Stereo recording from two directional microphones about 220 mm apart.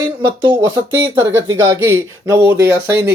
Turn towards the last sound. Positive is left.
turn(degrees=-10)  # may be behind; listen again after turning